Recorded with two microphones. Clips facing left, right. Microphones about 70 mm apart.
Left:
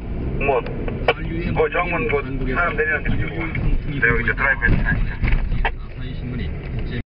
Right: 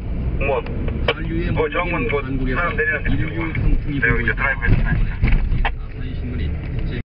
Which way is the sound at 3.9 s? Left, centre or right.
Centre.